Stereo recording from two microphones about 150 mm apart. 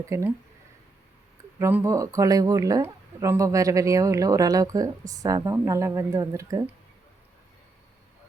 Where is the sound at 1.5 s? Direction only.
15° right (ahead or behind).